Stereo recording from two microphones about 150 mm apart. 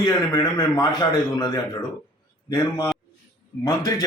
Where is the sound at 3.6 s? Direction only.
25° left (ahead or behind).